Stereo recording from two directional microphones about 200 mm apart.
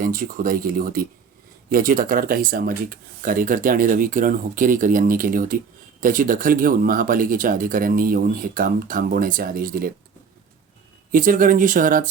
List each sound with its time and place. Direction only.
0.0 s speech: 45° right (ahead or behind)
11.1 s speech: 45° right (ahead or behind)